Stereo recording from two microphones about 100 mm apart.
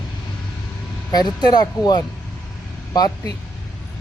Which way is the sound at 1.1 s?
40° left (ahead or behind).